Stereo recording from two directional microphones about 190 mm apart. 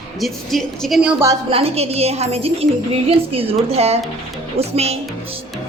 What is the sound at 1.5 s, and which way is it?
A woman's voice, 30° right (ahead or behind).